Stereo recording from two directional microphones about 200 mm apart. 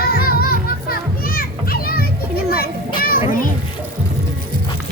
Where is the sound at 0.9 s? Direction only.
45° left (ahead or behind).